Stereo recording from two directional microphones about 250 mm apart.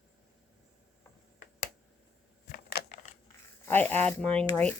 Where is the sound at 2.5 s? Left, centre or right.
Left.